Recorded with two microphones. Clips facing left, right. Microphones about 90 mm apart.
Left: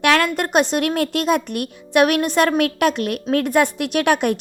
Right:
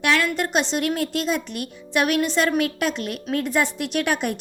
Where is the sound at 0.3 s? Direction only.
50° left (ahead or behind).